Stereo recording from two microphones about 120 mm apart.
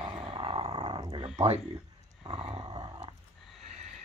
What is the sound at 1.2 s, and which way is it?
Wild animals, 65° right (ahead or behind).